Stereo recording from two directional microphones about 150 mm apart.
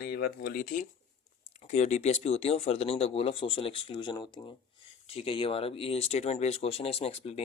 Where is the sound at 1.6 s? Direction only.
50° left (ahead or behind).